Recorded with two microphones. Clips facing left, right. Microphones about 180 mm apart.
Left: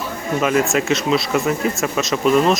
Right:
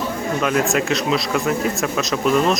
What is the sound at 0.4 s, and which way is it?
Speech, centre (ahead or behind).